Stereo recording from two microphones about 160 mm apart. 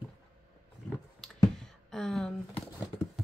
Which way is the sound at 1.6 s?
5° left (ahead or behind).